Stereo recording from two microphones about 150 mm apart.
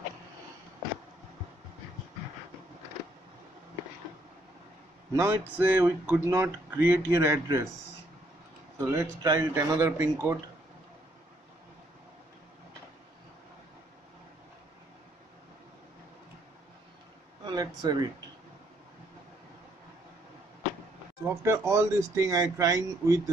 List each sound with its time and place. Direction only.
5.1 s speech: 15° right (ahead or behind)
8.7 s speech: 15° right (ahead or behind)
17.5 s a sound: 30° right (ahead or behind)
21.4 s speech: 20° right (ahead or behind)